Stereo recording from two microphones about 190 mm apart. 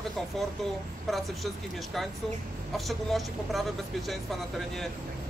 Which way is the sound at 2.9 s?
Centre (ahead or behind).